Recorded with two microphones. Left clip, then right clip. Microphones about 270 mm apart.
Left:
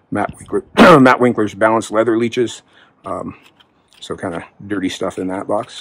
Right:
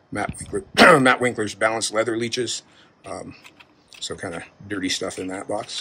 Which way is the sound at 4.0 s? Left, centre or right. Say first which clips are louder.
Left 6 dB; centre.